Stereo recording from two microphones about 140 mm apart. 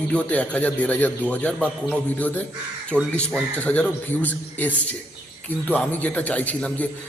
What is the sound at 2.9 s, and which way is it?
Speech, 15° right (ahead or behind).